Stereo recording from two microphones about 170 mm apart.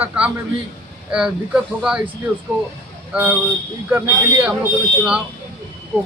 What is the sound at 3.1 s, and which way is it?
A man's voice, 10° right (ahead or behind).